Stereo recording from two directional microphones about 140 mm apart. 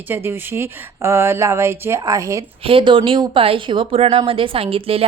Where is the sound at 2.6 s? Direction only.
40° right (ahead or behind).